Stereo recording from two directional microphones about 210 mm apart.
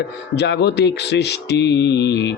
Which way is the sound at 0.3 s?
55° left (ahead or behind).